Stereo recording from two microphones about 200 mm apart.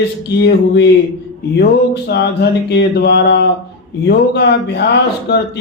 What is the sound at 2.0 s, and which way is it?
Speech, 55° left (ahead or behind).